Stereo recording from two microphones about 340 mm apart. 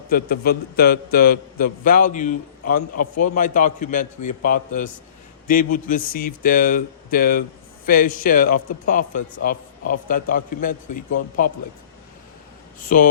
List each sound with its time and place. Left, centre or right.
0.1 s a man's voice: left
12.8 s a man's voice: left